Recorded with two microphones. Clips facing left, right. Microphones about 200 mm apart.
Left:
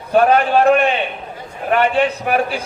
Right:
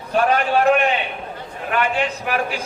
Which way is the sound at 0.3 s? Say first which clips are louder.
Left 1 dB; 35° left (ahead or behind).